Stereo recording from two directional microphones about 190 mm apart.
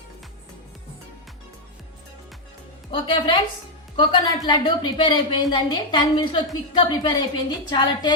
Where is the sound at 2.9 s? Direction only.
25° left (ahead or behind).